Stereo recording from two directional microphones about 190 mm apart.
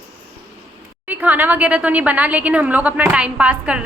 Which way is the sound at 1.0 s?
10° right (ahead or behind).